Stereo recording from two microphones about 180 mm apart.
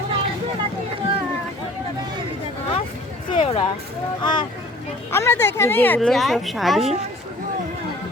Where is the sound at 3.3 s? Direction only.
30° left (ahead or behind).